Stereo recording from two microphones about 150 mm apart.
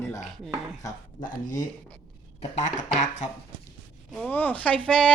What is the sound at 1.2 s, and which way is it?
Speech, 60° left (ahead or behind).